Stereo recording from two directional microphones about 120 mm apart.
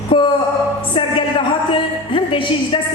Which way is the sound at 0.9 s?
45° left (ahead or behind).